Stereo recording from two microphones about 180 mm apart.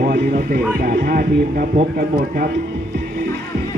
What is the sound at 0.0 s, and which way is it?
Speech, 55° right (ahead or behind).